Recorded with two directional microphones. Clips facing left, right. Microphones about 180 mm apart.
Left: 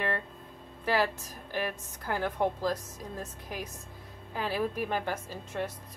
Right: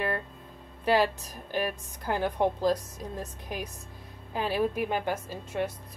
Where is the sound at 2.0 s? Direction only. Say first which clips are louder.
Right 3 dB; 20° right (ahead or behind).